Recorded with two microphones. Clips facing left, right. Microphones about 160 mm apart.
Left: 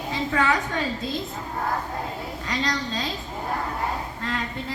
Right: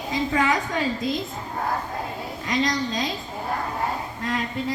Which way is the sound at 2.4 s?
15° right (ahead or behind).